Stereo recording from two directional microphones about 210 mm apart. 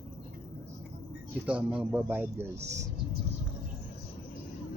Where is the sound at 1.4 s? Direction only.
5° right (ahead or behind).